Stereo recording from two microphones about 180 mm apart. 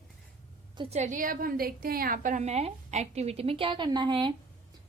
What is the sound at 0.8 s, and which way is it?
A woman's voice, 40° right (ahead or behind).